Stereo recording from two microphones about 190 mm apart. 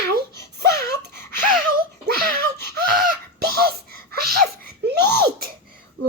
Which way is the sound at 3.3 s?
55° right (ahead or behind).